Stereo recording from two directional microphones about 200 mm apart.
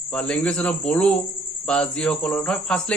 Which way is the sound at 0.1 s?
5° left (ahead or behind).